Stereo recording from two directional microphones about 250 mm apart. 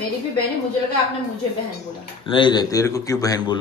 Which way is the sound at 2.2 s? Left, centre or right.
Centre.